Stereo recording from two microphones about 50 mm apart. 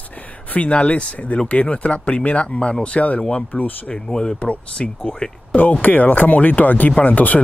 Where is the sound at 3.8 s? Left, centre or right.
Centre.